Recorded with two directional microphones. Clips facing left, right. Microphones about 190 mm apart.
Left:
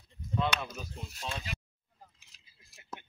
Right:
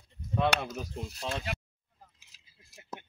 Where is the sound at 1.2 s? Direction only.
60° right (ahead or behind).